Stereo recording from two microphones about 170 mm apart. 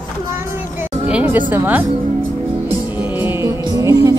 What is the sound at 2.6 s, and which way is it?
Music, 10° right (ahead or behind).